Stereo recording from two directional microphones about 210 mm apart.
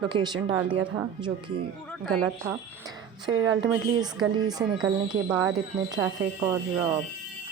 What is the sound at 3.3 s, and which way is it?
Speech, 70° right (ahead or behind).